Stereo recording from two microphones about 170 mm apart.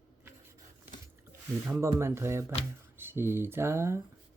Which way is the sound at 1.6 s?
15° right (ahead or behind).